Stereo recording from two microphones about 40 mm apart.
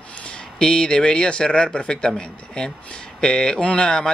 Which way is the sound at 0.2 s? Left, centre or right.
Left.